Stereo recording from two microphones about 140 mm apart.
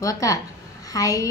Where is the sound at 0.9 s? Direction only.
25° left (ahead or behind).